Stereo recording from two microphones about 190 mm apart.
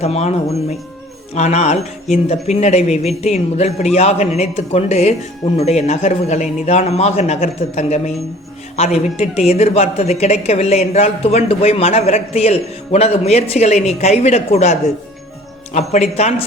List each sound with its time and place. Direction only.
0.0 s speech: 35° left (ahead or behind)
15.9 s speech: 35° left (ahead or behind)